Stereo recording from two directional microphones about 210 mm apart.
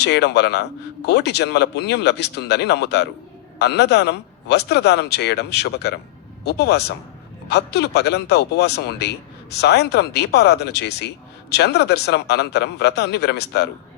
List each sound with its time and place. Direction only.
0.0 s speech: 55° left (ahead or behind)